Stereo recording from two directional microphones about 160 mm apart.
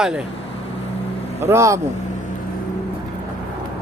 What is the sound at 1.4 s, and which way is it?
Speech, 15° right (ahead or behind).